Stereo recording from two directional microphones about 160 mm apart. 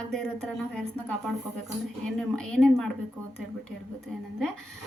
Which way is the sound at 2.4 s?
5° left (ahead or behind).